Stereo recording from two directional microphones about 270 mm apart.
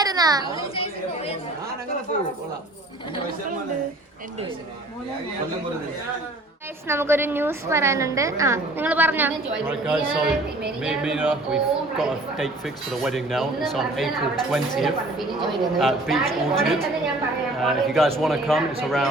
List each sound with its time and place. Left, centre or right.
0.0 s a sound: centre
0.5 s speech: left
6.8 s a woman's voice: centre